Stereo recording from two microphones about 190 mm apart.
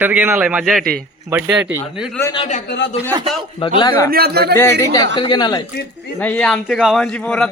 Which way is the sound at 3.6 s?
25° left (ahead or behind).